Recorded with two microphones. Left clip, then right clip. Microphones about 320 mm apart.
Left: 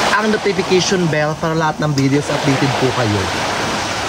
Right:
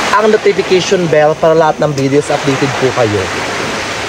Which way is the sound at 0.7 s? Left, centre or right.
Centre.